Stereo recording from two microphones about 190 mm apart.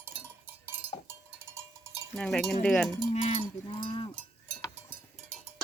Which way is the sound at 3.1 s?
35° left (ahead or behind).